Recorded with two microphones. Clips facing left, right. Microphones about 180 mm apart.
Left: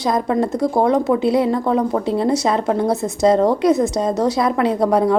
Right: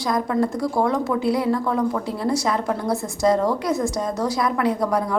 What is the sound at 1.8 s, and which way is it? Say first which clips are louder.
Speech: left 3 dB; 35° left (ahead or behind).